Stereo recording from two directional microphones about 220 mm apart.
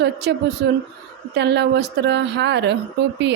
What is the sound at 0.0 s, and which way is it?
A woman's voice, 50° right (ahead or behind).